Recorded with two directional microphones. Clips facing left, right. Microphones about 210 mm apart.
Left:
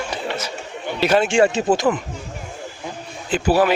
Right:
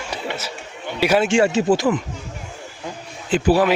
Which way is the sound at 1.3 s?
20° left (ahead or behind).